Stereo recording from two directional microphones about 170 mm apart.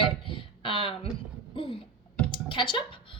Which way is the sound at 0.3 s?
30° left (ahead or behind).